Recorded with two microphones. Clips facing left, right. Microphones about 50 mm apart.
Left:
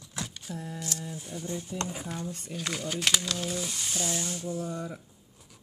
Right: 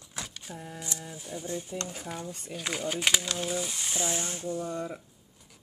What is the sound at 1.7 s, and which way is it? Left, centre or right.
Speech, centre.